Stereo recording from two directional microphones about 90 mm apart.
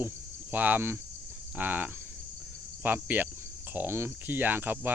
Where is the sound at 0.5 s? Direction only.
20° right (ahead or behind).